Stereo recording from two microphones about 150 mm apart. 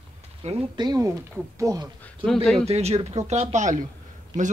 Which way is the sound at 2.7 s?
45° right (ahead or behind).